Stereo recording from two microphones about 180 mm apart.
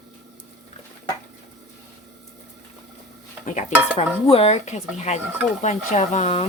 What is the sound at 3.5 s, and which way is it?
Stir, 40° left (ahead or behind).